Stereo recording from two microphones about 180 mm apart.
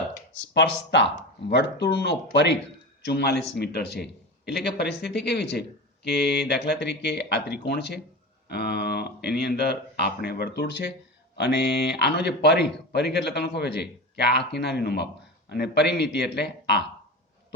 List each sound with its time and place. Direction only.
0.5 s a man's voice: 75° left (ahead or behind)